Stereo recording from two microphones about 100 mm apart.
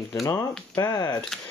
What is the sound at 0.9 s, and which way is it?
Speech, 40° left (ahead or behind).